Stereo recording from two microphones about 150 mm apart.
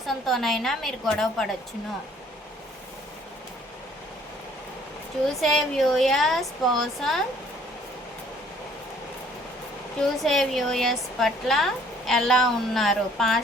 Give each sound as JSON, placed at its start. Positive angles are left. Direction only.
{"t": 0.0, "sound": "a woman's voice", "side_deg": 0}
{"t": 5.3, "sound": "a woman's voice", "side_deg": 0}
{"t": 10.0, "sound": "a woman's voice", "side_deg": 0}